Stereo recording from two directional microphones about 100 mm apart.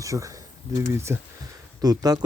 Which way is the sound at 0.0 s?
35° right (ahead or behind).